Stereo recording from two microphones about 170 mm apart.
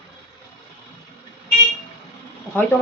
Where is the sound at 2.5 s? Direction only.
5° right (ahead or behind).